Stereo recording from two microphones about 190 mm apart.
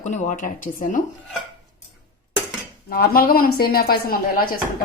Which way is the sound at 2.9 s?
50° left (ahead or behind).